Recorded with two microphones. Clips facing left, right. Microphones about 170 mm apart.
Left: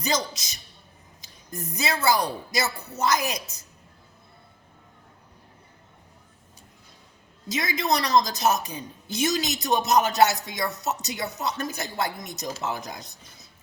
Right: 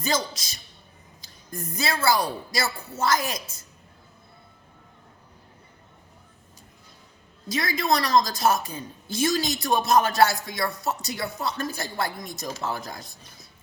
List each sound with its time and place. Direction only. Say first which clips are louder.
0.0 s speech: even; 20° left (ahead or behind)
1.2 s a sound: even; 25° left (ahead or behind)
1.7 s speech: even; 20° left (ahead or behind)
7.4 s speech: right 1 dB; 20° left (ahead or behind)